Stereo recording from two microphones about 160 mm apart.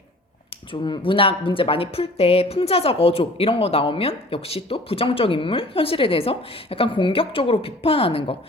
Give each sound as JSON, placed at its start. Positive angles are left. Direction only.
{"t": 0.7, "sound": "speech", "side_deg": 30}